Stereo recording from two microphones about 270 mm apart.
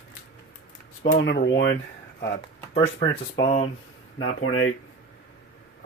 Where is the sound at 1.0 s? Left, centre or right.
Left.